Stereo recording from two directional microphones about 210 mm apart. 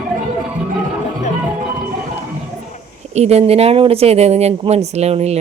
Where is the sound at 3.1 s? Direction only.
30° right (ahead or behind).